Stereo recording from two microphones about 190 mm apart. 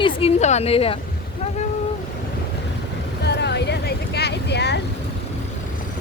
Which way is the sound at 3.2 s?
65° left (ahead or behind).